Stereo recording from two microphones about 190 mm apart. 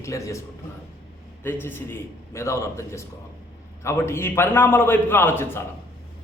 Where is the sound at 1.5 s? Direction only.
10° left (ahead or behind).